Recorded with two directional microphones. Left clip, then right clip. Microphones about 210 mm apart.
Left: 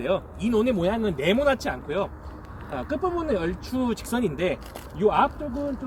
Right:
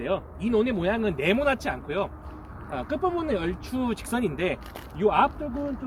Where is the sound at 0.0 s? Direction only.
50° left (ahead or behind).